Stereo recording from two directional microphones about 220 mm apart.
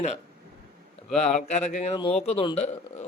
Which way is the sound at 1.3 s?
30° left (ahead or behind).